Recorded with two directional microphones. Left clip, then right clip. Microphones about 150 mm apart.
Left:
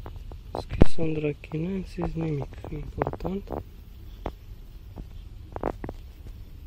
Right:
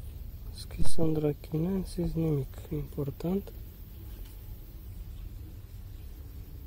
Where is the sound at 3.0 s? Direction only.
30° right (ahead or behind).